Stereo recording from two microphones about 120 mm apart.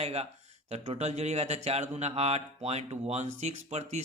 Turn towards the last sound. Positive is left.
turn(degrees=-65)  # may be behind; listen again after turning